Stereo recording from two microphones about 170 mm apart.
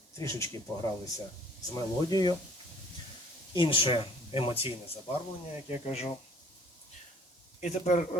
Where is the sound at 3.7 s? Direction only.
30° left (ahead or behind).